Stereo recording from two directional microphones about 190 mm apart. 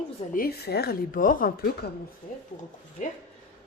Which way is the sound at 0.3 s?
55° left (ahead or behind).